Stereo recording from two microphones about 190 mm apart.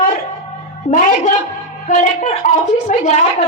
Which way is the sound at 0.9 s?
40° left (ahead or behind).